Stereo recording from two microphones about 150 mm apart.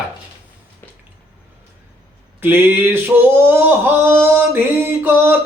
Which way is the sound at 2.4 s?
15° right (ahead or behind).